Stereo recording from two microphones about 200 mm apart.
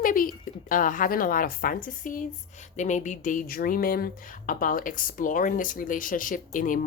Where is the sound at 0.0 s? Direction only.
45° left (ahead or behind).